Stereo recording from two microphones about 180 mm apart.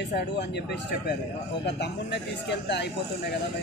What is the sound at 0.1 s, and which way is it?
Speech, 65° left (ahead or behind).